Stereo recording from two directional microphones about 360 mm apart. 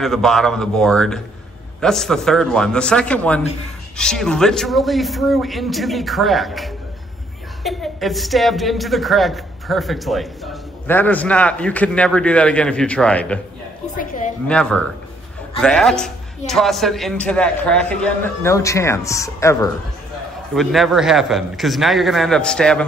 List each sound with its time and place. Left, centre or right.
0.0 s a woman's voice: centre
13.9 s a sound: left
14.5 s a woman's voice: centre